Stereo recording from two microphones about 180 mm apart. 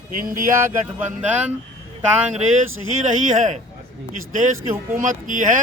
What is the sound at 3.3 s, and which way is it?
Speech, 45° right (ahead or behind).